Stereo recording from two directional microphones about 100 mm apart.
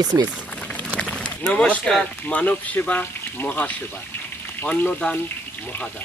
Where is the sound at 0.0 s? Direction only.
45° right (ahead or behind).